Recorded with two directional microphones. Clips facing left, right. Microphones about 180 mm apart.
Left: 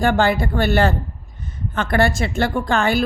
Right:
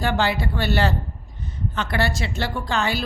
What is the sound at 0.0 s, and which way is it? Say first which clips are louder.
A woman's voice: left 5 dB; 50° left (ahead or behind).